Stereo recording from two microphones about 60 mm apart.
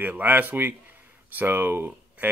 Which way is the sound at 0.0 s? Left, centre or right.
Right.